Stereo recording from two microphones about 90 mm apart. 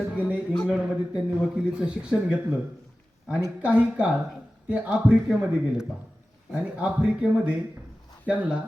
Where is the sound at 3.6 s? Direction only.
15° right (ahead or behind).